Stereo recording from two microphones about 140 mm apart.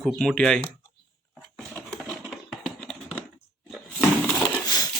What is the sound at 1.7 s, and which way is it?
Typing, centre (ahead or behind).